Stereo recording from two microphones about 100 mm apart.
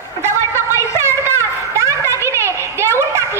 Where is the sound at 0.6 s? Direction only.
25° right (ahead or behind).